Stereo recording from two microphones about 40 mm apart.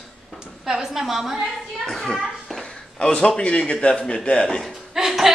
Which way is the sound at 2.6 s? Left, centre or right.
Left.